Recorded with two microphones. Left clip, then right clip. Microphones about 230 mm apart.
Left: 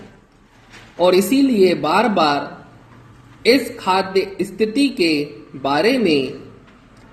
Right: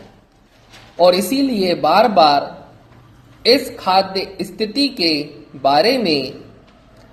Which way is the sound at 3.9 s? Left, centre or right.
Right.